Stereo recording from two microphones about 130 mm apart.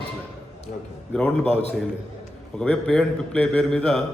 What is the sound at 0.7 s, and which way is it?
Speech, 90° left.